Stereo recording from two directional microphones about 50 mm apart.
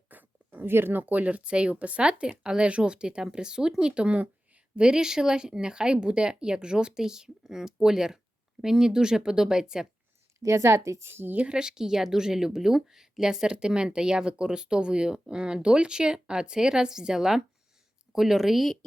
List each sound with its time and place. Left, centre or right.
0.1 s a sound: right
0.7 s speech: right
1.0 s speech: right; by 9.8 s centre
10.4 s a woman's voice: right
11.0 s speech: right
11.3 s speech: centre